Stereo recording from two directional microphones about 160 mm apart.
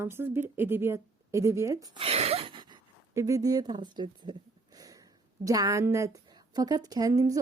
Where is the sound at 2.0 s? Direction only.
40° right (ahead or behind); by 5.0 s 25° right (ahead or behind).